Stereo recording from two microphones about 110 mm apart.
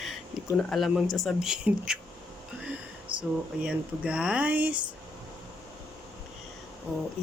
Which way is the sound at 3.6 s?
10° right (ahead or behind).